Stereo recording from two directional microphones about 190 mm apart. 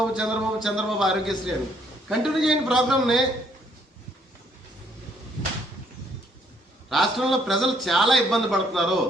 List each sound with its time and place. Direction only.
0.0 s a man's voice: 5° right (ahead or behind)
6.9 s a man's voice: centre (ahead or behind)